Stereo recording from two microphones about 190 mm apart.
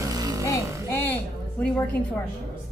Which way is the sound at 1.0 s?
10° left (ahead or behind).